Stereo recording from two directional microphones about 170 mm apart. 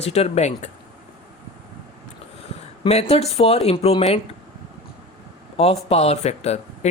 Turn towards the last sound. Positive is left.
turn(degrees=40)  # may be behind; listen again after turning